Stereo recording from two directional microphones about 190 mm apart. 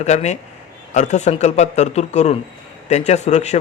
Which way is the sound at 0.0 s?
35° left (ahead or behind).